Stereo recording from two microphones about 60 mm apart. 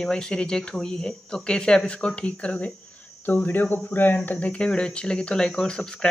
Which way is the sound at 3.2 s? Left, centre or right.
Left.